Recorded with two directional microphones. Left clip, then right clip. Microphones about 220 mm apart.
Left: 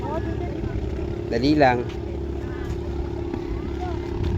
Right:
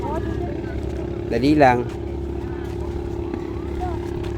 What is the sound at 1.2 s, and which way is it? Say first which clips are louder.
Speech: right 3 dB; 10° right (ahead or behind).